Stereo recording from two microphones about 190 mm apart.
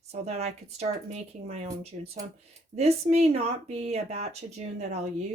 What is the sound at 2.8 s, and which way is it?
Speech, 35° right (ahead or behind).